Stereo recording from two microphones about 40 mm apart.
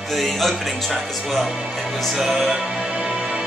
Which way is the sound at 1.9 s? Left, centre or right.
Centre.